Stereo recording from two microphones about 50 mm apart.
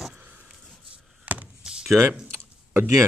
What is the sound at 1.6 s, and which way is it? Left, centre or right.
Door, centre.